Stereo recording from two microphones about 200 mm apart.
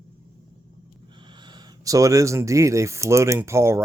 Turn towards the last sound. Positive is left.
turn(degrees=-15)  # may be behind; listen again after turning